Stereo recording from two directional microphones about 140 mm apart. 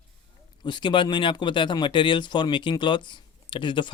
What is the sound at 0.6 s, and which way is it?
Speech, 35° left (ahead or behind).